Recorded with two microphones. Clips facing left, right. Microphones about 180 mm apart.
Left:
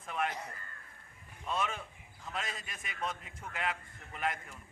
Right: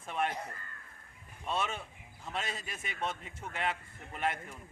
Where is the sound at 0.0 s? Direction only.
30° right (ahead or behind).